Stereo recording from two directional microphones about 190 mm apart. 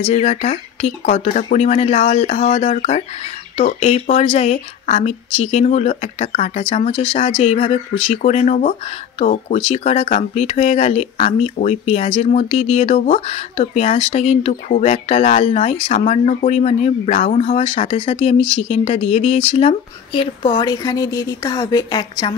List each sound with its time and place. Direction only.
0.0 s speech: 35° left (ahead or behind)